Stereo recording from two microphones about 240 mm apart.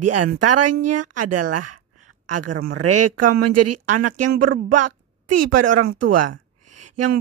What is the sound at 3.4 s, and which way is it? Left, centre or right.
A woman's voice, right.